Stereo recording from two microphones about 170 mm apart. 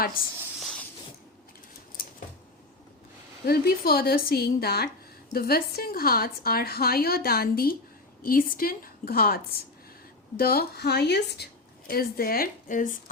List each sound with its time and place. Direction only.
3.4 s a woman's voice: 65° left (ahead or behind)
11.9 s a woman's voice: 60° left (ahead or behind)